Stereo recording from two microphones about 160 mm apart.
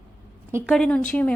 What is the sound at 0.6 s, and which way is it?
Speech, 5° left (ahead or behind).